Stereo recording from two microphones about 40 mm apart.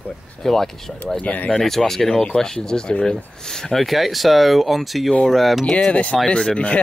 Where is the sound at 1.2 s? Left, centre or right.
Left.